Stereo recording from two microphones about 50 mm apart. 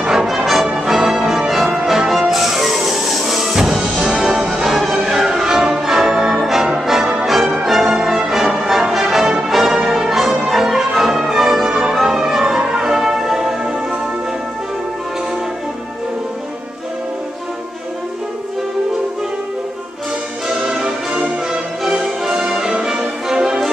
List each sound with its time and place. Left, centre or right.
0.0 s music: centre
20.6 s music: centre